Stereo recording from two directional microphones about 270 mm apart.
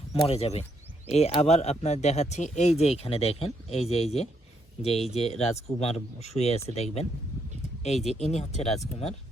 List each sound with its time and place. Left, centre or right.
0.3 s speech: left